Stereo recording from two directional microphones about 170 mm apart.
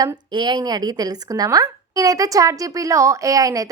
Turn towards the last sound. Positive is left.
turn(degrees=-20)  # may be behind; listen again after turning